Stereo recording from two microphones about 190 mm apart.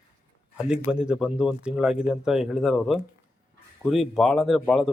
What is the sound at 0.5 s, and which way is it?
A man's voice, 5° right (ahead or behind).